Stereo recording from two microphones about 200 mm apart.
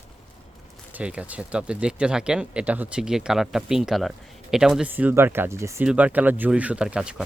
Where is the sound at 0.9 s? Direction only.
5° right (ahead or behind).